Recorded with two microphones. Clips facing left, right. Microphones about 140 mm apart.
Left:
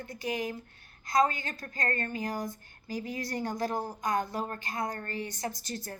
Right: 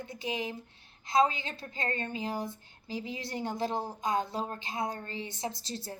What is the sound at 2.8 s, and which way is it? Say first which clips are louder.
Speech: left 2 dB; 45° left (ahead or behind).